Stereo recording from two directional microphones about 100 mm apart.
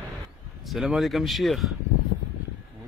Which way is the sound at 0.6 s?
Centre (ahead or behind).